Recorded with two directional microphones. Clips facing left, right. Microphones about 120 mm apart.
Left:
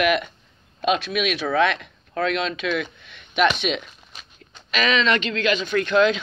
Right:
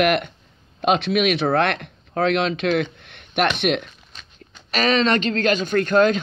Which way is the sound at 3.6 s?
55° right (ahead or behind).